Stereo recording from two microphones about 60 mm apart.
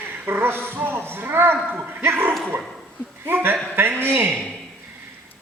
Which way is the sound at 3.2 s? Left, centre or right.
Right.